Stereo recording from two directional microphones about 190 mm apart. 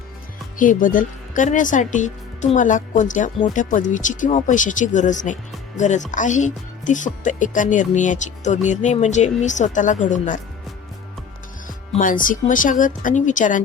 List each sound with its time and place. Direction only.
0.6 s speech: 45° left (ahead or behind)
11.9 s speech: 45° left (ahead or behind)